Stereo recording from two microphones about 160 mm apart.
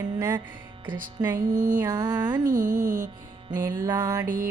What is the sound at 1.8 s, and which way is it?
Music, 25° right (ahead or behind).